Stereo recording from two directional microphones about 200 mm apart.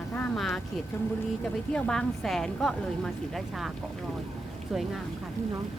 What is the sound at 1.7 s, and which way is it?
A woman's voice, 5° left (ahead or behind).